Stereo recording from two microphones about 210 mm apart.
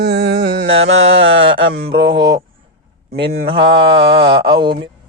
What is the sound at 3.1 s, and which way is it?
Mantra, 50° right (ahead or behind).